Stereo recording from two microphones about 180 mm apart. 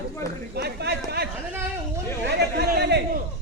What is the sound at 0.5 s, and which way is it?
Speech, 65° right (ahead or behind).